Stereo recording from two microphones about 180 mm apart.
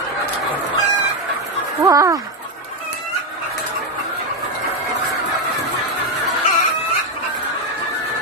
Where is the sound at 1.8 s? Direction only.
20° right (ahead or behind).